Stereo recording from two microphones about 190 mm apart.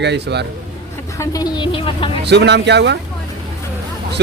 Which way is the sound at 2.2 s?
65° right (ahead or behind).